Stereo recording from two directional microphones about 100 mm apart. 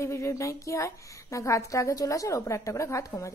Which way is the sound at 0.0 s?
30° left (ahead or behind).